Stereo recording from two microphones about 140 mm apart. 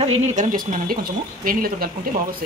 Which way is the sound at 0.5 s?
85° right.